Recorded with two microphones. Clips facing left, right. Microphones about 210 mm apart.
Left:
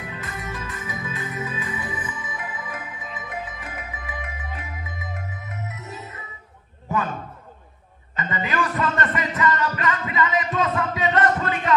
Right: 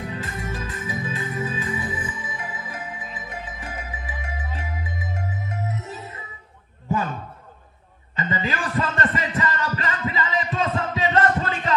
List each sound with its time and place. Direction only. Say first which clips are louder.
0.1 s music: right 3 dB; 30° right (ahead or behind)
5.7 s music: right 4 dB; 30° right (ahead or behind)
8.2 s music: left 1 dB; 30° right (ahead or behind)